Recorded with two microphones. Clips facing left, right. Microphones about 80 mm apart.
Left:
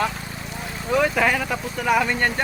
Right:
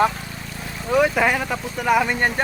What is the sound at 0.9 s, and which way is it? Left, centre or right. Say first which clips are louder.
Speech: right 2 dB; centre.